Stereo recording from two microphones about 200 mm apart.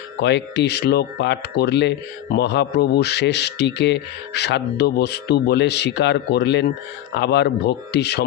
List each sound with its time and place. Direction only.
0.2 s speech: 60° left (ahead or behind)